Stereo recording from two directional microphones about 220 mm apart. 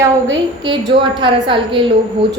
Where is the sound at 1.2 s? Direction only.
20° right (ahead or behind).